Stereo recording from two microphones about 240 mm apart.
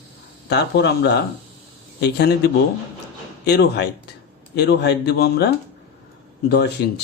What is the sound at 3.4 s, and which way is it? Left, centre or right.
Speech, left.